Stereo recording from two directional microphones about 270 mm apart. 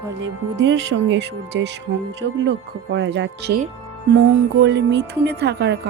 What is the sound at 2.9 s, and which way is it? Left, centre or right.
Music, right.